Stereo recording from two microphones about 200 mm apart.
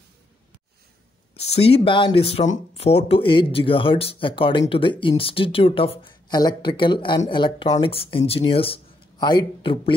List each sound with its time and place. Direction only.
1.3 s speech: 30° left (ahead or behind)